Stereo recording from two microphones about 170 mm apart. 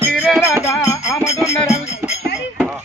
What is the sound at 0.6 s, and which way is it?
Music, 20° left (ahead or behind).